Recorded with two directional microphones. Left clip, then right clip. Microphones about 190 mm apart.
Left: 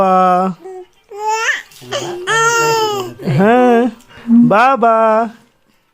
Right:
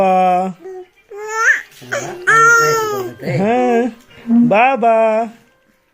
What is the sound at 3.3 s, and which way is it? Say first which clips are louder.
Speech: left 4 dB; 35° left (ahead or behind).